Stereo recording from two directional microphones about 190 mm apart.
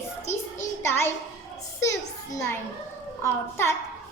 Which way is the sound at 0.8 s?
10° left (ahead or behind).